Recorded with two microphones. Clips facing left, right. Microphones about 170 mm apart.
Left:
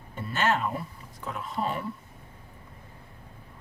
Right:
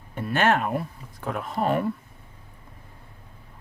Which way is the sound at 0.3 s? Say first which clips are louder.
Right 5 dB; 60° right (ahead or behind).